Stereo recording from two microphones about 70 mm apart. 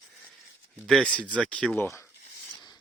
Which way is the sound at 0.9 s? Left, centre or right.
Centre.